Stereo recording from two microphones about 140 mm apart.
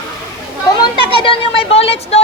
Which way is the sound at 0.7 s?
30° left (ahead or behind).